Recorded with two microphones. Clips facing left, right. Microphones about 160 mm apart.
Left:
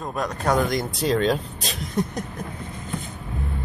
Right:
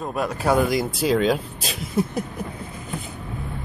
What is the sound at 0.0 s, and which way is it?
Speech, 5° right (ahead or behind).